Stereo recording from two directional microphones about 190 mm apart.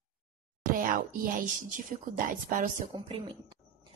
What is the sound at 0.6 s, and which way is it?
A woman's voice, 45° right (ahead or behind).